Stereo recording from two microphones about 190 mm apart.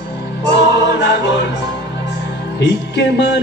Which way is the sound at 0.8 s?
65° left (ahead or behind).